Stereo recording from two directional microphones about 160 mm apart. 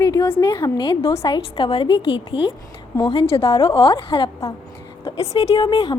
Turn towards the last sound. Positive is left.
turn(degrees=25)  # may be behind; listen again after turning